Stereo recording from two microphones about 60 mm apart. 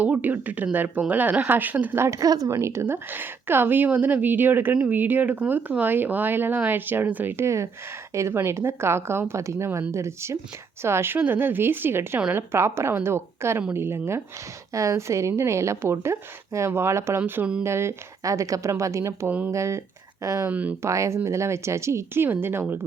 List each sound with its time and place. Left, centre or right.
0.0 s speech: right
2.0 s speech: right
2.5 s a woman's voice: right
2.8 s a woman's voice: right
7.3 s a woman's voice: right
14.7 s a woman's voice: right
17.2 s a woman's voice: right
18.2 s a woman's voice: right
20.5 s speech: right
20.8 s a woman's voice: right